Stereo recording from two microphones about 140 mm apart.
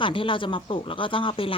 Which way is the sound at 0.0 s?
40° left (ahead or behind).